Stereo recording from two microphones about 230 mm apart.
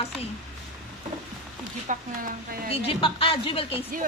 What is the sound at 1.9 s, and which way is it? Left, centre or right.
Speech, right.